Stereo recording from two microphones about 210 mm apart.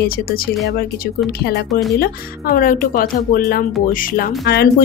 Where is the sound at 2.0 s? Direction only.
45° left (ahead or behind).